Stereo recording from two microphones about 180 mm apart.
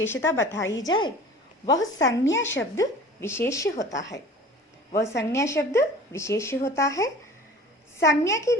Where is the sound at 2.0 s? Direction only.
90° left.